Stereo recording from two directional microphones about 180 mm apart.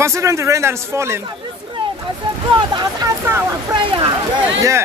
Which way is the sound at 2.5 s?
25° right (ahead or behind).